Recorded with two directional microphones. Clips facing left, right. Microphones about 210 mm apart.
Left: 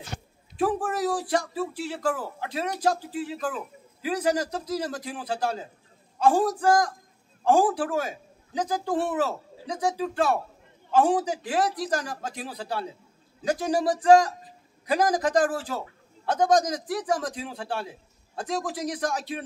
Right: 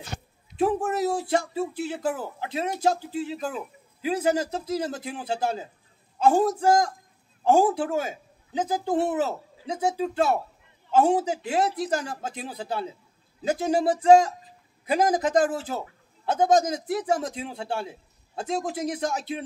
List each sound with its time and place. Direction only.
0.6 s speech: 25° right (ahead or behind)